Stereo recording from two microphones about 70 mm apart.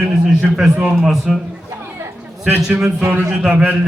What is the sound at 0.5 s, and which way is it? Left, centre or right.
Speech, centre.